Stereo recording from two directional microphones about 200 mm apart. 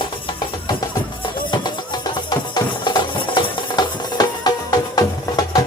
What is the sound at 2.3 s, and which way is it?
Music, 20° left (ahead or behind).